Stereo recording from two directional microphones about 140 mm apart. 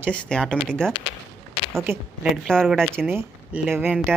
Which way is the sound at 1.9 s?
15° right (ahead or behind).